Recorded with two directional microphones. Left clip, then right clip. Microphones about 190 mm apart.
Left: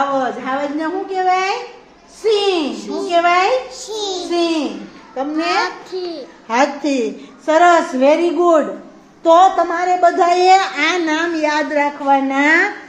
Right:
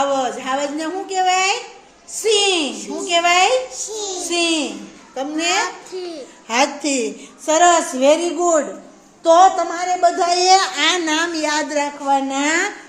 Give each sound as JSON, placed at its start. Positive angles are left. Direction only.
{"t": 0.2, "sound": "a woman's voice", "side_deg": -10}
{"t": 5.5, "sound": "a child's voice", "side_deg": 0}
{"t": 6.0, "sound": "a woman's voice", "side_deg": -15}